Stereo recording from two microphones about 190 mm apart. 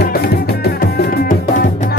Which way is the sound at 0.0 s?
55° left (ahead or behind).